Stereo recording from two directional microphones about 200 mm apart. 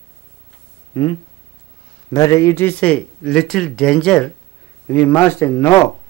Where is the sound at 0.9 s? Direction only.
25° left (ahead or behind).